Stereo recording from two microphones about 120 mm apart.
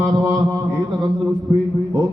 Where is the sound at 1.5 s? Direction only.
25° right (ahead or behind).